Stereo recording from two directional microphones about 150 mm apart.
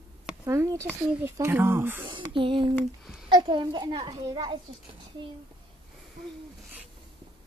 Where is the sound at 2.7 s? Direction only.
5° right (ahead or behind).